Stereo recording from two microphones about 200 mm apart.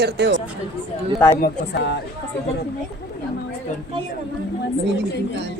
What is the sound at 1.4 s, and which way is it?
Speech, 55° left (ahead or behind).